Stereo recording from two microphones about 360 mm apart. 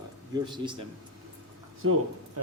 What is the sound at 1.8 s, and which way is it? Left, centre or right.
Speech, right.